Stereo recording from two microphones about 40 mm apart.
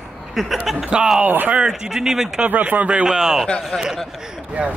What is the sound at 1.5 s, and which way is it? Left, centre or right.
Speech, centre.